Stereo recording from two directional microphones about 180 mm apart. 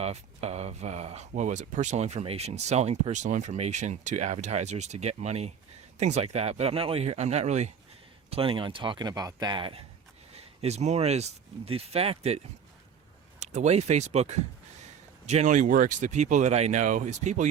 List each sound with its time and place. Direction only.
0.0 s speech: 35° right (ahead or behind)
13.4 s speech: 40° right (ahead or behind)